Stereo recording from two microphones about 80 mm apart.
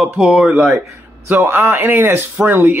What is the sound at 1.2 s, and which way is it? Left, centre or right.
Speech, right.